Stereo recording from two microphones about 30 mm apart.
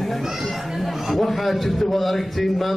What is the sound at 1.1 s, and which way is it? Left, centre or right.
A man's voice, centre.